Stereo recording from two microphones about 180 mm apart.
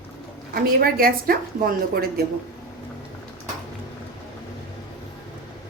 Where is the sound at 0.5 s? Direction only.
55° right (ahead or behind).